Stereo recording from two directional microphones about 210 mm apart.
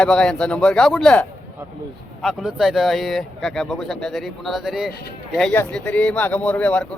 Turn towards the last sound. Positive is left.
turn(degrees=5)  # may be behind; listen again after turning